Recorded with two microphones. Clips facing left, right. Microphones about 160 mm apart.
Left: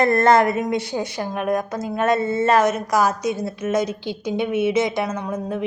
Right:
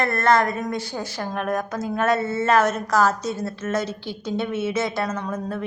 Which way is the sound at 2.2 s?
5° right (ahead or behind).